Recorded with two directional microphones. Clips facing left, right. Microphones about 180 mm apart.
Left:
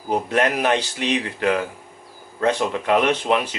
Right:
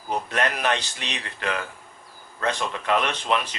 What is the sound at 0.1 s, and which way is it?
Speech, 15° left (ahead or behind).